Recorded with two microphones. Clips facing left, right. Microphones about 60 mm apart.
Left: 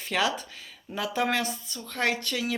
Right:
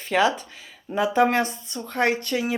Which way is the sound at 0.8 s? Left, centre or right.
Right.